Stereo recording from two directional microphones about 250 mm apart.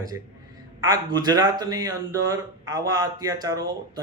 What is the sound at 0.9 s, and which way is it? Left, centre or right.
A man's voice, centre.